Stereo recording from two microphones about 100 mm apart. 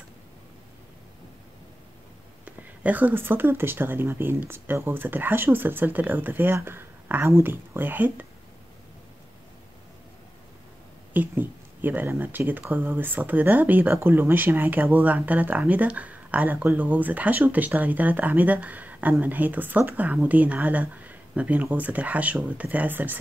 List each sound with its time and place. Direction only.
2.4 s speech: 15° right (ahead or behind)
11.1 s speech: 20° right (ahead or behind)